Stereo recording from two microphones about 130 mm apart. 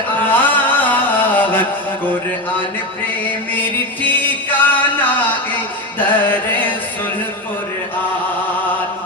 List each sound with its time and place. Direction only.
0.3 s music: 15° left (ahead or behind)
4.2 s music: 15° left (ahead or behind)